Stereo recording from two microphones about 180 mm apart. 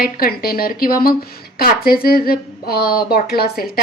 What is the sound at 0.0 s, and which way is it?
Speech, 55° left (ahead or behind).